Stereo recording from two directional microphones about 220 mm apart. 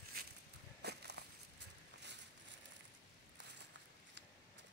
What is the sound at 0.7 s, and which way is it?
Walk, 50° right (ahead or behind).